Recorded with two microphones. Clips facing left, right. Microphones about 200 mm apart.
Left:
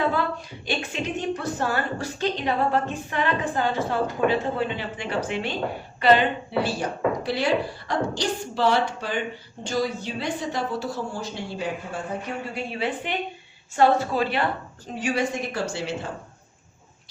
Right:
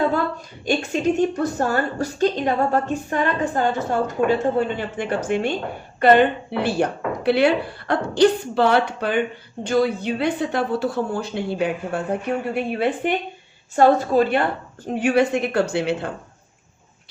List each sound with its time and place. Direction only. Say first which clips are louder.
0.6 s a woman's voice: right 9 dB; 45° right (ahead or behind); by 12.0 s 65° right (ahead or behind)
12.5 s a woman's voice: right 6 dB; 55° right (ahead or behind)
14.8 s speech: right 7 dB; 60° right (ahead or behind)